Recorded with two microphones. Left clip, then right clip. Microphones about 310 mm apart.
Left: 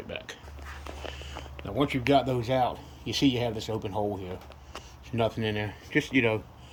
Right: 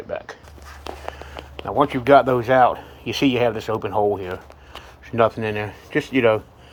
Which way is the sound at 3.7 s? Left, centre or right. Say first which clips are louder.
Right 11 dB; right.